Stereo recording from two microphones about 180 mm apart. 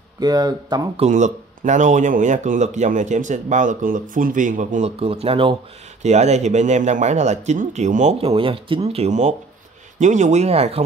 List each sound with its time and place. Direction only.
0.2 s speech: 20° right (ahead or behind)
0.9 s speech: 40° right (ahead or behind)